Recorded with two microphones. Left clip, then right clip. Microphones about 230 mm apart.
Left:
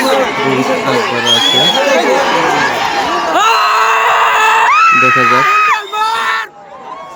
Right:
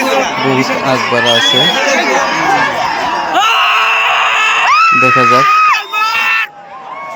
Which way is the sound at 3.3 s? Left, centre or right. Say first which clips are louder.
Even; left.